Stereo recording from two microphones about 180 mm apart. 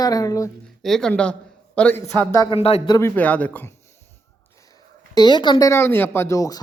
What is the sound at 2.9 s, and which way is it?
Speech, 15° left (ahead or behind).